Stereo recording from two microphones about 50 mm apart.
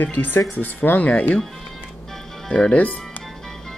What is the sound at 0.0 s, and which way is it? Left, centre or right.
Speech, left.